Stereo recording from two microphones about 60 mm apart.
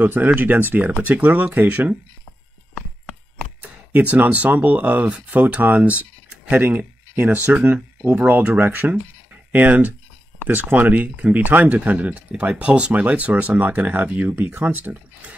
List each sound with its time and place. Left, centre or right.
0.0 s speech: right
3.6 s speech: right